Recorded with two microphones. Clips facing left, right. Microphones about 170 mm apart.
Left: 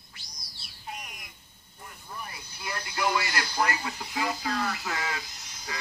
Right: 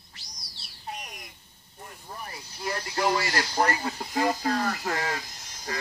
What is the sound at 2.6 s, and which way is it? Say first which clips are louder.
Speech: right 4 dB; 35° right (ahead or behind).